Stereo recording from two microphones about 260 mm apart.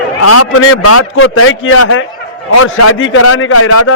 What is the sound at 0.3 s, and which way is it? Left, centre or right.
A man's voice, left.